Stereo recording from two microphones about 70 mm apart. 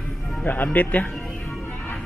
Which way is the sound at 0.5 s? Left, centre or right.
Left.